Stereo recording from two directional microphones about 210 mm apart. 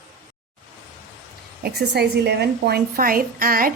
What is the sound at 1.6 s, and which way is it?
A woman's voice, 50° right (ahead or behind).